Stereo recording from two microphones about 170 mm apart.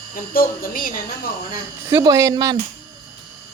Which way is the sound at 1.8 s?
20° right (ahead or behind).